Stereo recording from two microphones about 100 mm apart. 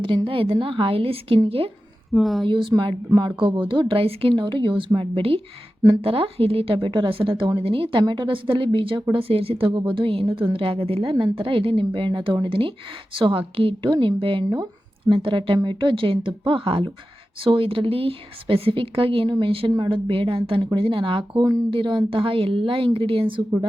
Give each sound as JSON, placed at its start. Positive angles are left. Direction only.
{"t": 0.3, "sound": "a woman's voice", "side_deg": -60}
{"t": 2.1, "sound": "speech", "side_deg": 0}
{"t": 2.4, "sound": "a woman's voice", "side_deg": -55}
{"t": 9.1, "sound": "a woman's voice", "side_deg": -70}